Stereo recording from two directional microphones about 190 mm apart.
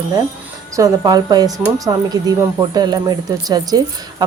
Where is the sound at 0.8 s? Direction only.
20° right (ahead or behind).